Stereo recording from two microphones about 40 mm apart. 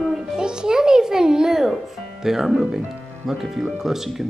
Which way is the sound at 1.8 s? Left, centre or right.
Centre.